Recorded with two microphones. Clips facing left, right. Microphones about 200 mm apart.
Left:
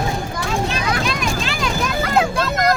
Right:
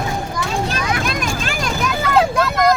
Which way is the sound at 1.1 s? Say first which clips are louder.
Even; 50° right (ahead or behind).